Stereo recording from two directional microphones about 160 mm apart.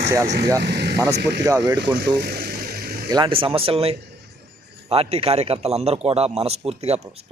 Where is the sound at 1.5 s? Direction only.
20° right (ahead or behind).